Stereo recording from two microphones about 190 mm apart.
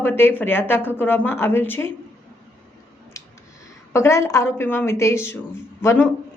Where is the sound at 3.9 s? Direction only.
15° left (ahead or behind).